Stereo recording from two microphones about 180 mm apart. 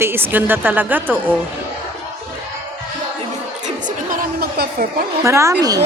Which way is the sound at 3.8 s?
50° right (ahead or behind).